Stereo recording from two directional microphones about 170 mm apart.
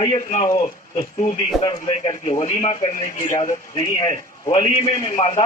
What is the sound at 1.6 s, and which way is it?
A man's voice, 30° left (ahead or behind).